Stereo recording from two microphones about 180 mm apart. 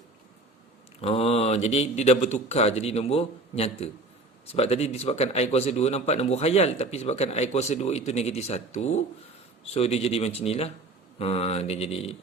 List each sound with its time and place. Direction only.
1.0 s speech: 35° left (ahead or behind)